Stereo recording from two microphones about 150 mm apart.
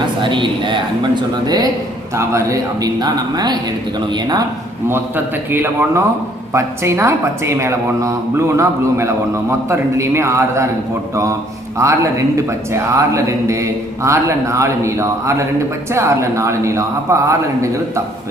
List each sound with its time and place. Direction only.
0.2 s a woman's voice: 35° right (ahead or behind)
4.9 s a man's voice: 15° right (ahead or behind)